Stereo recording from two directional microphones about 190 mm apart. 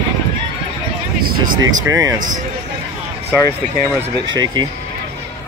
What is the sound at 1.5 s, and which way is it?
Speech, 90° right.